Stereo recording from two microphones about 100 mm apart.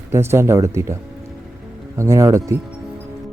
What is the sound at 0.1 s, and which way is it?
Speech, 25° right (ahead or behind).